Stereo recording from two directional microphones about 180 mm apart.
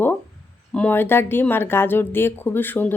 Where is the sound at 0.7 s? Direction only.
10° left (ahead or behind).